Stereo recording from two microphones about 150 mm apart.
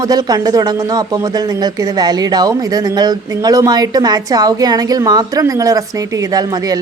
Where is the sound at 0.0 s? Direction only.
25° right (ahead or behind).